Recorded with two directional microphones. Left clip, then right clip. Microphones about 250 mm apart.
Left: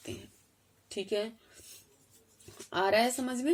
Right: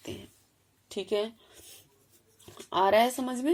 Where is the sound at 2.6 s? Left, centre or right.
Right.